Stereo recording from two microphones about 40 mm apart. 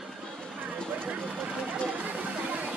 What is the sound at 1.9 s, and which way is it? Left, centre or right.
Music, right.